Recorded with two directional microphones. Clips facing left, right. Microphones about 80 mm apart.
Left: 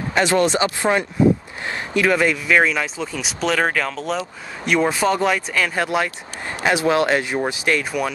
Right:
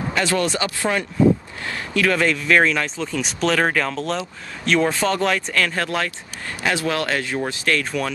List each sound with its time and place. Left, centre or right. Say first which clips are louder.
0.1 s speech: left 5 dB; left